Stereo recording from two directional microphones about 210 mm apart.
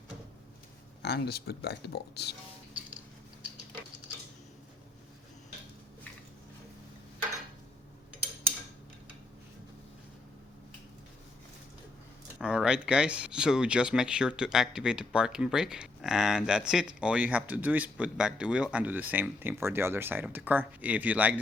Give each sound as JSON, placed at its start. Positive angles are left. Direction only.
{"t": 1.0, "sound": "speech", "side_deg": 50}
{"t": 12.4, "sound": "speech", "side_deg": -5}